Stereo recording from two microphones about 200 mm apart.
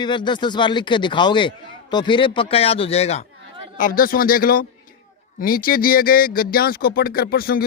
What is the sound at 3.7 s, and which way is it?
Speech, 45° left (ahead or behind).